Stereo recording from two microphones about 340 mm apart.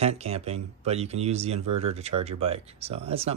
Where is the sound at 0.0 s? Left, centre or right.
Centre.